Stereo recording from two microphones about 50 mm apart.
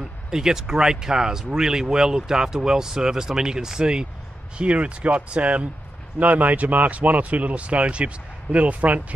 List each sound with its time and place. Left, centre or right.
0.3 s speech: centre; by 9.0 s right